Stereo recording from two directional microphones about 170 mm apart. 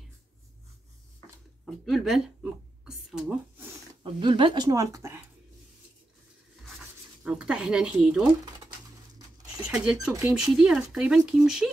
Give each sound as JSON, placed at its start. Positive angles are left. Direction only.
{"t": 1.9, "sound": "speech", "side_deg": 0}
{"t": 4.0, "sound": "speech", "side_deg": -30}
{"t": 7.2, "sound": "speech", "side_deg": -5}
{"t": 9.6, "sound": "speech", "side_deg": -5}